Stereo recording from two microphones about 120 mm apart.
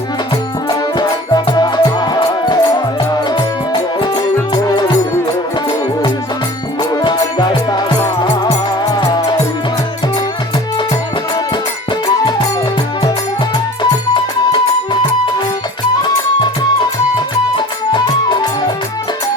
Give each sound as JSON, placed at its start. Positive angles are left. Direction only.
{"t": 0.7, "sound": "music", "side_deg": 35}
{"t": 6.9, "sound": "music", "side_deg": 35}
{"t": 17.9, "sound": "music", "side_deg": 40}